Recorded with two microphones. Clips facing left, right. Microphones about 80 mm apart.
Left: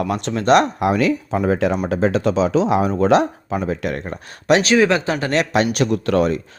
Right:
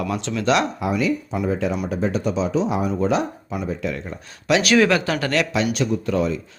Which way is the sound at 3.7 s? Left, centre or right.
Left.